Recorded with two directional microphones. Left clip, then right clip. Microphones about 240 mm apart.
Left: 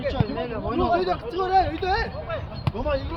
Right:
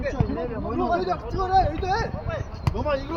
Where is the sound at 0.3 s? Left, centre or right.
Centre.